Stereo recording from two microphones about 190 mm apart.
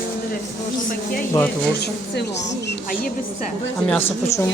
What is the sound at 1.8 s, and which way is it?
Speech, 60° left (ahead or behind).